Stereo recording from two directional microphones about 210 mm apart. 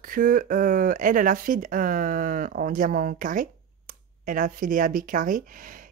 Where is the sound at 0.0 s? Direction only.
40° right (ahead or behind).